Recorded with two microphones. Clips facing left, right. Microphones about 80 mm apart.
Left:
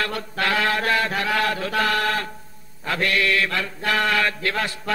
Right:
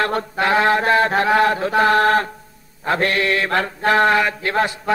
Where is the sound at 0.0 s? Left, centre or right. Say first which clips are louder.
Right 6 dB; right.